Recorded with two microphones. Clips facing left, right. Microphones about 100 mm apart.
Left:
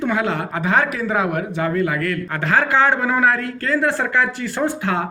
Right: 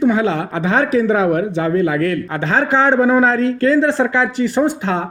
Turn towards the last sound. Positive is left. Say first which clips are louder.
# right 4 dB
turn(degrees=-20)  # may be behind; listen again after turning